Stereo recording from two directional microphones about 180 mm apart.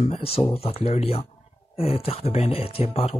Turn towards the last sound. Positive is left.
turn(degrees=35)  # may be behind; listen again after turning